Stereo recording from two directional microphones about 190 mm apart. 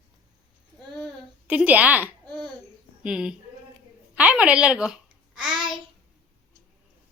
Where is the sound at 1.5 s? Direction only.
5° right (ahead or behind).